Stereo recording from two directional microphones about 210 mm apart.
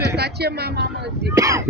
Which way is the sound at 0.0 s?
50° right (ahead or behind).